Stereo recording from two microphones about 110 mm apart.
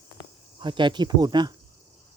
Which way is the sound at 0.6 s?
45° right (ahead or behind).